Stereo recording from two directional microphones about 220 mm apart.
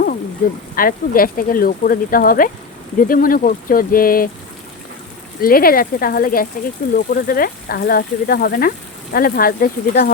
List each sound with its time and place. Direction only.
0.4 s speech: 40° left (ahead or behind)
5.4 s speech: 40° left (ahead or behind)